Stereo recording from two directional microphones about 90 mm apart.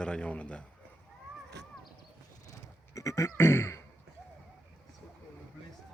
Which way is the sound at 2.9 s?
35° left (ahead or behind).